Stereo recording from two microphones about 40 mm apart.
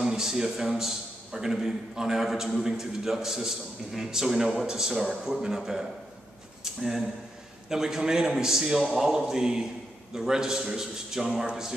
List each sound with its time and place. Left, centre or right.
0.0 s a man's voice: centre